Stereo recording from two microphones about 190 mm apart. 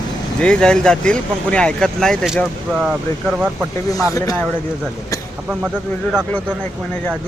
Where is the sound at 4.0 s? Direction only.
20° left (ahead or behind).